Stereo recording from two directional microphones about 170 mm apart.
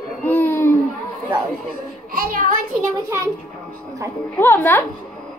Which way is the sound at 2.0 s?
55° right (ahead or behind).